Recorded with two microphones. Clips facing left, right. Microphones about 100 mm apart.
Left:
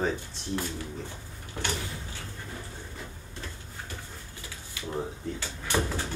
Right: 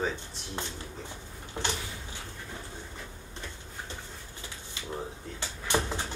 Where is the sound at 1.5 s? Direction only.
20° right (ahead or behind).